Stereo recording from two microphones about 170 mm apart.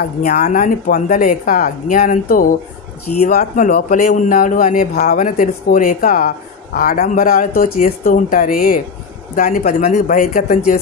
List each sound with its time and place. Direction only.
0.3 s a man's voice: 55° left (ahead or behind)